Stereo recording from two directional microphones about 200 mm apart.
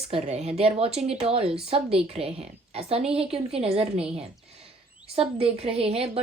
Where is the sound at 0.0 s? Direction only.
30° right (ahead or behind).